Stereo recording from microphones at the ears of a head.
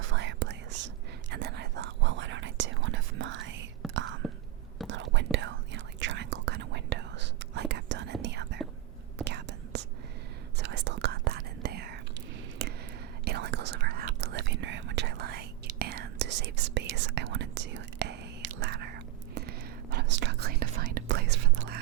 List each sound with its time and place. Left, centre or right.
0.0 s whispering: right
13.2 s whispering: right